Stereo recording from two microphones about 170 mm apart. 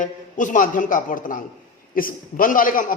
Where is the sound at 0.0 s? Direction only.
50° left (ahead or behind).